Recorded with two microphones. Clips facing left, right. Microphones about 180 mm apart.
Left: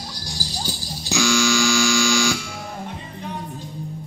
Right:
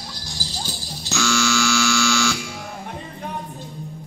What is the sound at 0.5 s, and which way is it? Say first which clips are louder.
Hum: left 2 dB; 15° left (ahead or behind).